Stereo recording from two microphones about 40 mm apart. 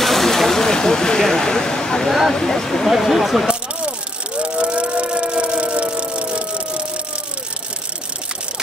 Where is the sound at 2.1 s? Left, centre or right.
Centre.